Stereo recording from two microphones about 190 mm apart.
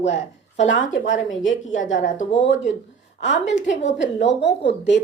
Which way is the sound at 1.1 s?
85° left.